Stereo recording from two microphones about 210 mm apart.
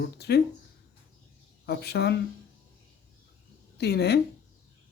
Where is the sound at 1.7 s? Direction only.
50° left (ahead or behind).